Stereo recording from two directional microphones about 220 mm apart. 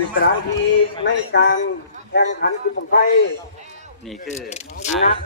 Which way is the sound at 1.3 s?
50° left (ahead or behind).